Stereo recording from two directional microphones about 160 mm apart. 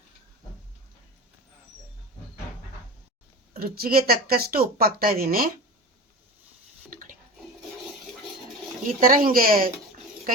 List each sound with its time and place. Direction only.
3.5 s speech: 70° right (ahead or behind)
6.9 s bathtub: 55° right (ahead or behind)
9.0 s speech: 60° right (ahead or behind)